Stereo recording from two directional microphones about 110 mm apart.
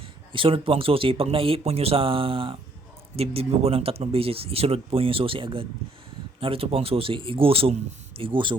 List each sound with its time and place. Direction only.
0.3 s speech: 55° right (ahead or behind)